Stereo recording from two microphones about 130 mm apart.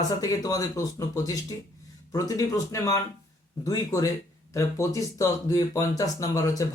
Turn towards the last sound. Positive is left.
turn(degrees=25)  # may be behind; listen again after turning